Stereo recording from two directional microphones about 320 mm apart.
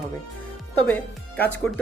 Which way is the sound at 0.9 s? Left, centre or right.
Centre.